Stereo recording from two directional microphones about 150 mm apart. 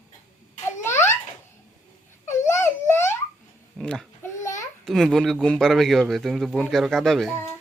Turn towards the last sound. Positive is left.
turn(degrees=0)  # may be behind; listen again after turning